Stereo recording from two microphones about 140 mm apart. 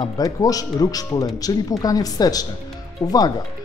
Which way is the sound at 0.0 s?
25° left (ahead or behind).